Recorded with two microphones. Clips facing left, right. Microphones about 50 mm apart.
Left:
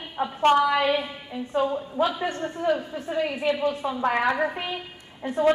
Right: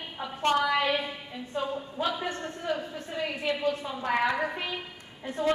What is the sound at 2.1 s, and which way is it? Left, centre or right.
Speech, left.